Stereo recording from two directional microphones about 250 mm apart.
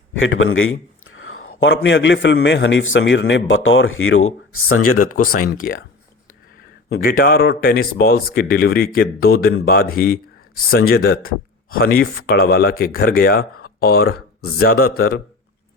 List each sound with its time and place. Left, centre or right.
0.2 s a man's voice: left
5.3 s speech: left
6.9 s speech: left